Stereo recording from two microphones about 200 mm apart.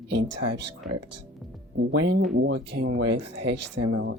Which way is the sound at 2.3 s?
60° right (ahead or behind).